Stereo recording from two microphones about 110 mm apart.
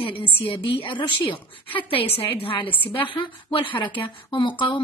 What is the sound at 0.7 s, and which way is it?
A woman's voice, 50° left (ahead or behind).